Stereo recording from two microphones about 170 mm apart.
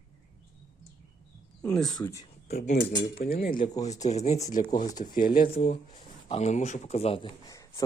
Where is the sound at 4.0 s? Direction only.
45° left (ahead or behind).